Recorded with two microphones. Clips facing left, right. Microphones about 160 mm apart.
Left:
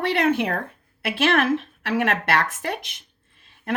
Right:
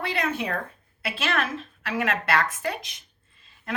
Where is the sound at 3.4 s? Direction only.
65° left (ahead or behind).